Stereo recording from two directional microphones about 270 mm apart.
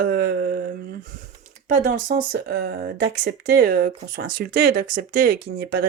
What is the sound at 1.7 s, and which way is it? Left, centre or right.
Speech, right.